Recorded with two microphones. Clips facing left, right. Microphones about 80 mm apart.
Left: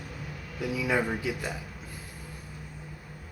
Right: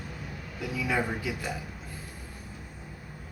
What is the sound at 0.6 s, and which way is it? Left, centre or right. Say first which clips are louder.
Speech: left 2 dB; centre.